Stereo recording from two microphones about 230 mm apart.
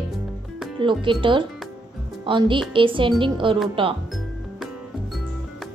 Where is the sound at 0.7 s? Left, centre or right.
Right.